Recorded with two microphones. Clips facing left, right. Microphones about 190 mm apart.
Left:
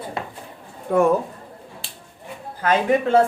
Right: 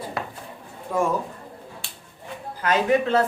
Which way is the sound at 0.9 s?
60° left (ahead or behind).